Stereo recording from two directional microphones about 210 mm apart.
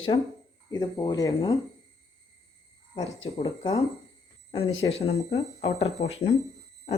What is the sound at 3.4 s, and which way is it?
Speech, 25° left (ahead or behind).